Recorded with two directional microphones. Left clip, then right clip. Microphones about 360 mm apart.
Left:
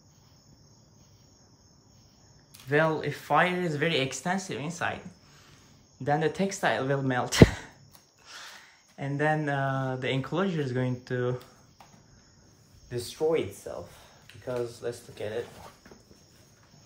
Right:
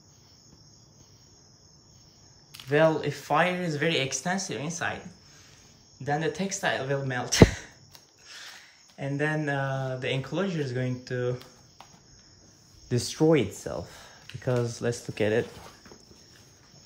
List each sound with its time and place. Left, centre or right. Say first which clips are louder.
2.7 s speech: right 3 dB; centre
6.0 s speech: left 2 dB; centre
12.9 s speech: right 4 dB; right